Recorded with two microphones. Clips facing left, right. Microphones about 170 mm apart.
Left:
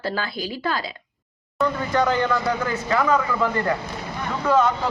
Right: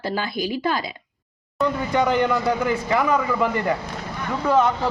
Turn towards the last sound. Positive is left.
turn(degrees=-15)  # may be behind; listen again after turning